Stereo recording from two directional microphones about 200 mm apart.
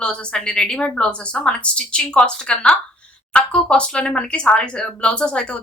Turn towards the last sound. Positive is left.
turn(degrees=5)  # may be behind; listen again after turning